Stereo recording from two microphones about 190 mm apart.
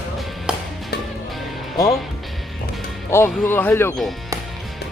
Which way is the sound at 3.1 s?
10° left (ahead or behind).